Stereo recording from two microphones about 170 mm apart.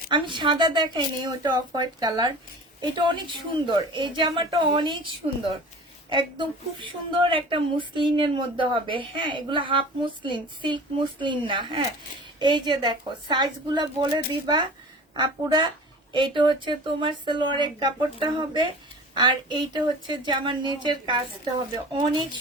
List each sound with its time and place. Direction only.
0.1 s a woman's voice: 30° right (ahead or behind)
6.1 s a woman's voice: 30° right (ahead or behind)